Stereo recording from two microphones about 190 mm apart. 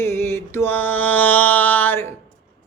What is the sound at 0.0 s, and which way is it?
Mantra, 15° left (ahead or behind).